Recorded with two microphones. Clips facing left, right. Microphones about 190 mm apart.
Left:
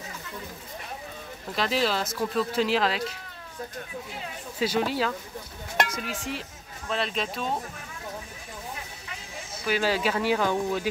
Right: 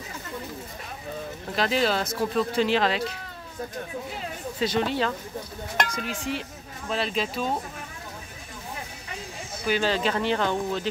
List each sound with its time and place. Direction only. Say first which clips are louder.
1.5 s speech: right 2 dB; centre (ahead or behind)
4.6 s speech: right 1 dB; 5° left (ahead or behind)
9.7 s speech: right 1 dB; 5° left (ahead or behind)